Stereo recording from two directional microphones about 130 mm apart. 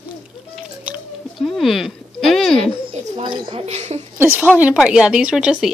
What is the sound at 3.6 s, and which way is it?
Speech, 55° right (ahead or behind).